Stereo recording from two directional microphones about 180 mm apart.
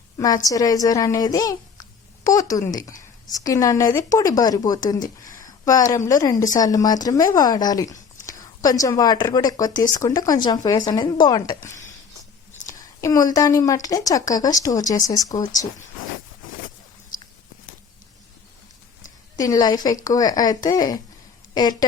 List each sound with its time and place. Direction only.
0.2 s a child's voice: 20° left (ahead or behind)
19.4 s a woman's voice: 20° left (ahead or behind)